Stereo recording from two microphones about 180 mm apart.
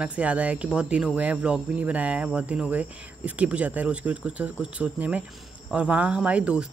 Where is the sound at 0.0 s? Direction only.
5° right (ahead or behind).